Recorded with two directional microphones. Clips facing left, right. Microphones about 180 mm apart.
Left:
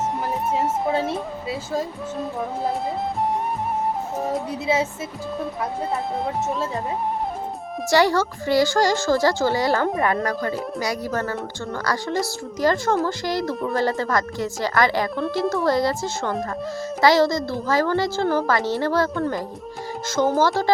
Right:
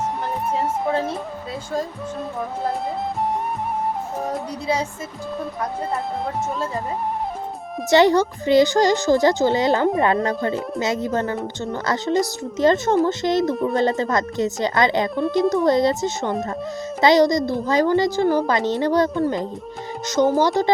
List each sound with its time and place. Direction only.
0.5 s speech: centre (ahead or behind)
4.2 s speech: centre (ahead or behind)
6.2 s speech: centre (ahead or behind)
7.9 s a child's voice: 20° right (ahead or behind)